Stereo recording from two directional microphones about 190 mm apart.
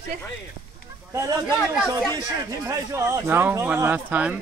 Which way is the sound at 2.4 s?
15° right (ahead or behind).